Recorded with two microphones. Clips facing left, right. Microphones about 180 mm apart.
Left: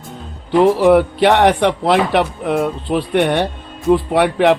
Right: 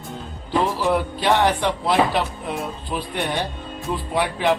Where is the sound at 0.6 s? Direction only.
65° left (ahead or behind).